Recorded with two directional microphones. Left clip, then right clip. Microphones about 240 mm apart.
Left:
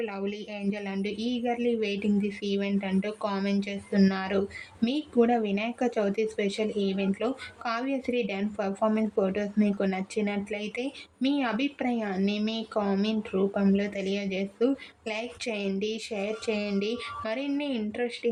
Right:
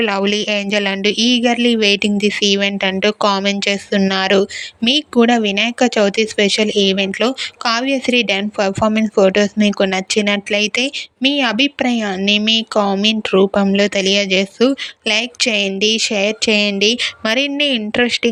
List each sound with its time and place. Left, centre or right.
0.0 s a woman's voice: right